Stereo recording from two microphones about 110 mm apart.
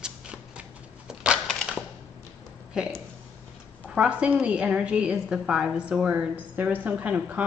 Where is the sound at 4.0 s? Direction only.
10° right (ahead or behind).